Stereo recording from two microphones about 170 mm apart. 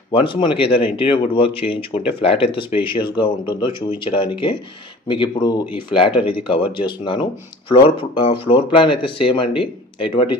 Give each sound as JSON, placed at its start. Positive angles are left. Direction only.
{"t": 0.1, "sound": "speech", "side_deg": 30}